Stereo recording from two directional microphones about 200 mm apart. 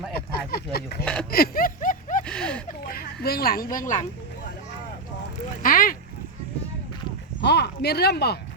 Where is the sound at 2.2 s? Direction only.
5° left (ahead or behind).